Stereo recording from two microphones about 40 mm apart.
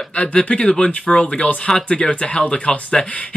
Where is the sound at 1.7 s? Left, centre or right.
Centre.